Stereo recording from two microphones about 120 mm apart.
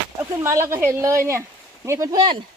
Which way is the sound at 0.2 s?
25° right (ahead or behind).